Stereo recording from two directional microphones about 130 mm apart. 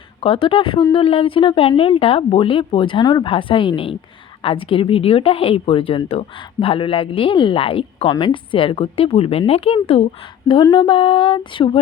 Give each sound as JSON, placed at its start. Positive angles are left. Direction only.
{"t": 0.2, "sound": "speech", "side_deg": 45}